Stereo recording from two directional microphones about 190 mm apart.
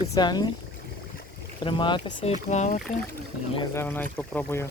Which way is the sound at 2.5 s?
40° left (ahead or behind).